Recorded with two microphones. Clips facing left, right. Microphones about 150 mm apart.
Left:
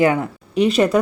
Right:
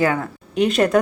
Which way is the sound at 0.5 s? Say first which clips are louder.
Left 1 dB; centre (ahead or behind).